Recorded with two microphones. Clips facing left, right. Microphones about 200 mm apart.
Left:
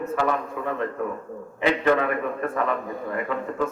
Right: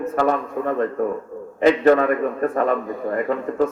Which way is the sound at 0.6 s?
40° right (ahead or behind).